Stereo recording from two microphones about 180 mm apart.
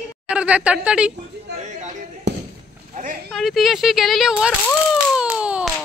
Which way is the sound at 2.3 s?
75° right (ahead or behind).